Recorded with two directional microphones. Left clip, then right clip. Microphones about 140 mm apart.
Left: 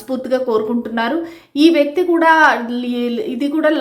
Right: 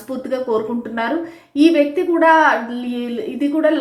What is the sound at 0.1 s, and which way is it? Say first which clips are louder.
A woman's voice: left 3 dB; 35° left (ahead or behind).